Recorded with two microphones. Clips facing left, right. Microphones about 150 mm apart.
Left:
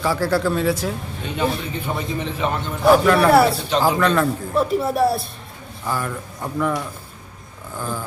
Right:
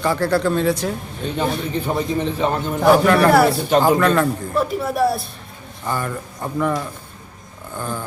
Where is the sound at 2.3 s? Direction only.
35° right (ahead or behind).